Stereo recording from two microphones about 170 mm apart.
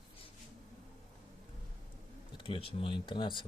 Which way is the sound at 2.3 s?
30° left (ahead or behind).